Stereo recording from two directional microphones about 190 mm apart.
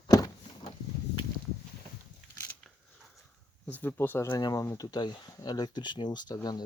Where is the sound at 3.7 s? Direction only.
10° left (ahead or behind).